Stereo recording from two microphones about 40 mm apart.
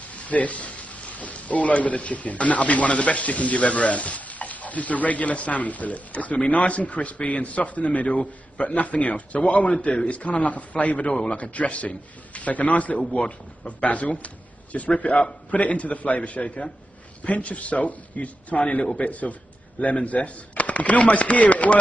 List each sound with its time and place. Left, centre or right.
0.1 s speech: left
11.1 s a man's voice: left
11.3 s a man's voice: left